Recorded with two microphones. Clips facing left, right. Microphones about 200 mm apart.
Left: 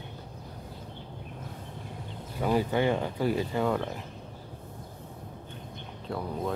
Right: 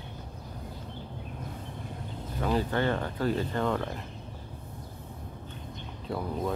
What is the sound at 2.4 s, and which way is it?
Speech, 10° left (ahead or behind).